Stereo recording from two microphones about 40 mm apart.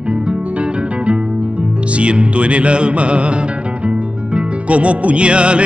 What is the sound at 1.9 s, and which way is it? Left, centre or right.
Music, right.